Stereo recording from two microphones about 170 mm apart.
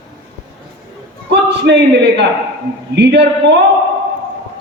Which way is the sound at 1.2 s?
90° right.